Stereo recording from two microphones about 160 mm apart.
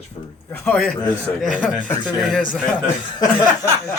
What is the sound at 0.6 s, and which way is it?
Speech, 5° left (ahead or behind).